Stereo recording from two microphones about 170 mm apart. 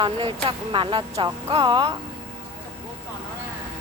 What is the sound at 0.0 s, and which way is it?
Speech, 30° right (ahead or behind).